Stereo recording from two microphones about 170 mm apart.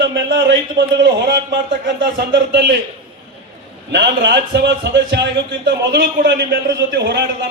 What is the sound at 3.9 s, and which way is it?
A man's voice, 90° right.